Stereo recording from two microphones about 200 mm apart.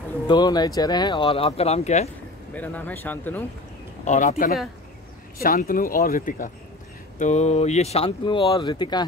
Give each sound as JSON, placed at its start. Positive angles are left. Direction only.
{"t": 0.3, "sound": "speech", "side_deg": 20}
{"t": 2.5, "sound": "speech", "side_deg": 10}
{"t": 4.0, "sound": "speech", "side_deg": 35}